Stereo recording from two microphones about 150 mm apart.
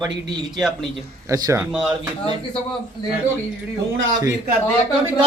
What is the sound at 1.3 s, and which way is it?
Speech, 20° right (ahead or behind).